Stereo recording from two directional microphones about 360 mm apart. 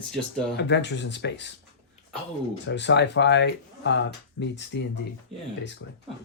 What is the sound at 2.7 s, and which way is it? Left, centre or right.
Speech, left.